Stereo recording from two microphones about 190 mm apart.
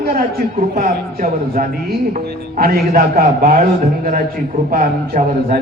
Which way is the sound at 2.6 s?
50° right (ahead or behind).